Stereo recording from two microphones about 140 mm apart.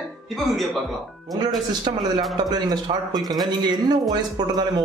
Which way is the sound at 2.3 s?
30° right (ahead or behind).